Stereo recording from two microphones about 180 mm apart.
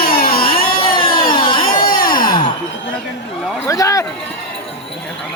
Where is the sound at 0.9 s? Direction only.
30° left (ahead or behind).